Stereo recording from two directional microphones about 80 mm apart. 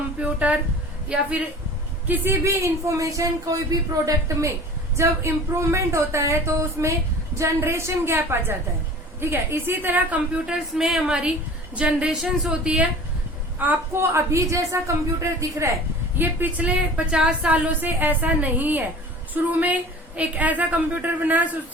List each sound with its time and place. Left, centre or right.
0.2 s a sound: centre
1.1 s a woman's voice: centre
2.0 s a woman's voice: right
10.8 s a woman's voice: centre
13.6 s a woman's voice: right
16.1 s a woman's voice: right